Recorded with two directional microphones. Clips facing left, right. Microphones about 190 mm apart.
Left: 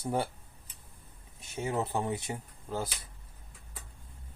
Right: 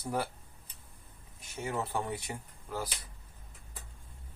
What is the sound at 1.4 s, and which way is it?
Speech, 20° left (ahead or behind).